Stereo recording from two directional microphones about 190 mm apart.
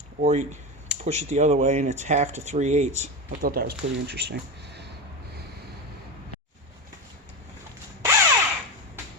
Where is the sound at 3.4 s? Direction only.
50° right (ahead or behind).